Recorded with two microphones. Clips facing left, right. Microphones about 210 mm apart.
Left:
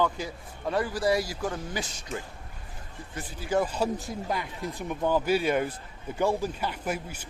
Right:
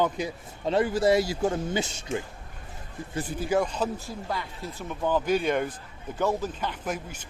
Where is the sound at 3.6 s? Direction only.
10° left (ahead or behind).